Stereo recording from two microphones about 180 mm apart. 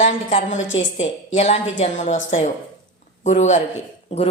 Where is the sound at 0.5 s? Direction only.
90° left.